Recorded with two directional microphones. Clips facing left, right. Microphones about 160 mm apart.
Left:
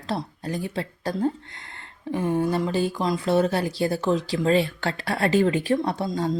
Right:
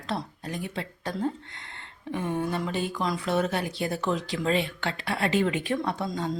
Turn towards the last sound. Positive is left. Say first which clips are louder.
# left 4 dB
turn(degrees=35)  # may be behind; listen again after turning